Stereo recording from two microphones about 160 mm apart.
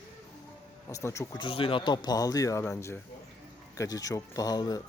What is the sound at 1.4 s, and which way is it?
Speech, 35° left (ahead or behind).